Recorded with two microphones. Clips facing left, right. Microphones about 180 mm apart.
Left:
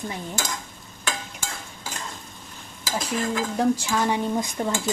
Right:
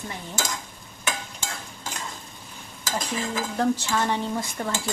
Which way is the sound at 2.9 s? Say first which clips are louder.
Left 1 dB; 10° left (ahead or behind).